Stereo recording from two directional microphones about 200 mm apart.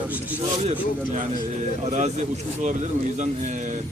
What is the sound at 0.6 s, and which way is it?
Speech, 35° right (ahead or behind).